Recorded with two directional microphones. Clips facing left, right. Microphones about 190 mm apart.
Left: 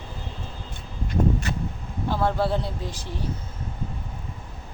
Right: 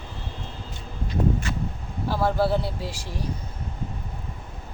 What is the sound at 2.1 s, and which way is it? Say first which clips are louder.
Speech: right 1 dB; 10° right (ahead or behind).